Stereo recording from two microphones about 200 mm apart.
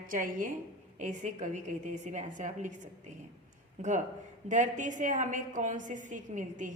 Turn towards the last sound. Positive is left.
turn(degrees=-40)  # may be behind; listen again after turning